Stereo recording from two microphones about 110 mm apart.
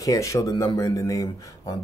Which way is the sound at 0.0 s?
30° left (ahead or behind).